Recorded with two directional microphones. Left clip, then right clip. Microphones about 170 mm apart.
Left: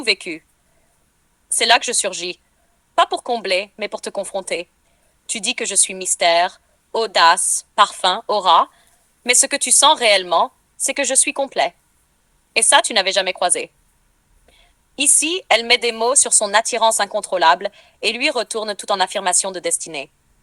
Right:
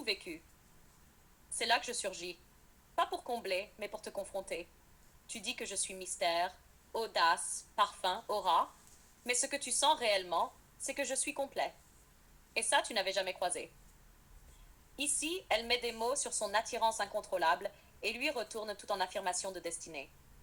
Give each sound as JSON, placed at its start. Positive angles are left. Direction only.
{"t": 0.0, "sound": "a woman's voice", "side_deg": 50}
{"t": 1.5, "sound": "a woman's voice", "side_deg": 50}
{"t": 14.9, "sound": "a woman's voice", "side_deg": 50}